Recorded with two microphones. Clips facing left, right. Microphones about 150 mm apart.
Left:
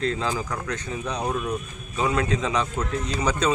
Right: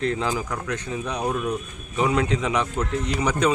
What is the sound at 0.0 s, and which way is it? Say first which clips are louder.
Speech: right 1 dB; 20° right (ahead or behind).